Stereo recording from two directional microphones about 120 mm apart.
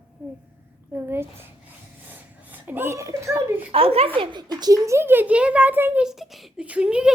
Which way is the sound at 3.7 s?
55° right (ahead or behind).